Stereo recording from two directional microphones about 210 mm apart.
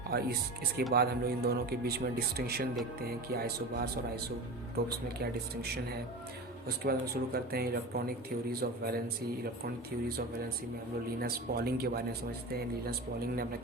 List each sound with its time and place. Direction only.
0.1 s speech: 50° right (ahead or behind)
11.2 s speech: 45° right (ahead or behind)